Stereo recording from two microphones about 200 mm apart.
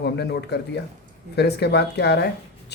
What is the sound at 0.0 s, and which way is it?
Speech, 55° left (ahead or behind).